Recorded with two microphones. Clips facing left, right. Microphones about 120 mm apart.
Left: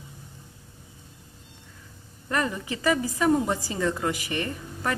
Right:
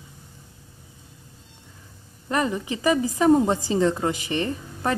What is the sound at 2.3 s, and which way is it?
A woman's voice, 20° right (ahead or behind).